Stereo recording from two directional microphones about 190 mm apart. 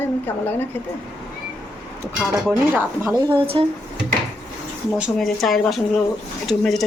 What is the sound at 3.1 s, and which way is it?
Speech, 25° right (ahead or behind).